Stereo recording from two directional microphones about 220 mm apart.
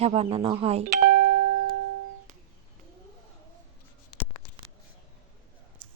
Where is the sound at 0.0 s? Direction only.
25° right (ahead or behind).